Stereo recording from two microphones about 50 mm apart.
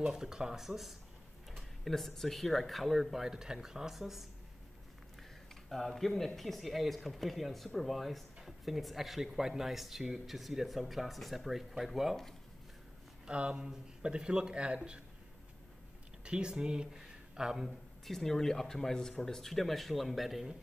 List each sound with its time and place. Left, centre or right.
0.0 s speech: centre
5.5 s speech: centre
13.3 s speech: right
16.3 s speech: centre
18.0 s speech: centre